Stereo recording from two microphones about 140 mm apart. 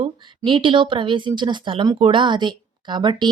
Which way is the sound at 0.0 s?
35° right (ahead or behind).